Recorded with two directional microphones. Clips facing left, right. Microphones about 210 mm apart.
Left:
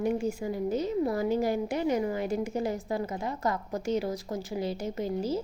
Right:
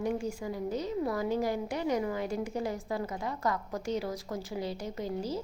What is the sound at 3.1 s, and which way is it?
Speech, 25° left (ahead or behind).